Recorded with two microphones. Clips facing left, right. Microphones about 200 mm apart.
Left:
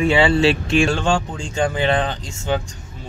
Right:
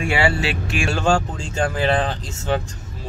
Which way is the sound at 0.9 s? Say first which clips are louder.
Even; 5° right (ahead or behind).